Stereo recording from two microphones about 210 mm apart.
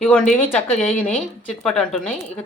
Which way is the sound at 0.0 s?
5° left (ahead or behind).